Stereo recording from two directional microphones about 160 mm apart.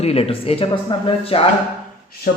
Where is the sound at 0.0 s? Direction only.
40° left (ahead or behind).